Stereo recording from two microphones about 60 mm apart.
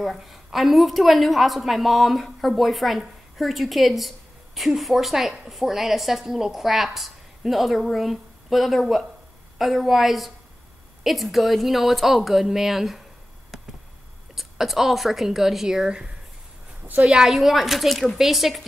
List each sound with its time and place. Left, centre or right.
0.2 s a woman's voice: centre
13.5 s a sound: centre
14.3 s a woman's voice: centre